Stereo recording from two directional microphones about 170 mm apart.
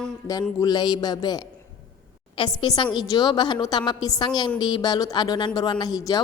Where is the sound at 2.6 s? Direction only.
25° left (ahead or behind).